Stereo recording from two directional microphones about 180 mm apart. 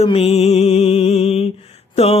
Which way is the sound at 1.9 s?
35° left (ahead or behind).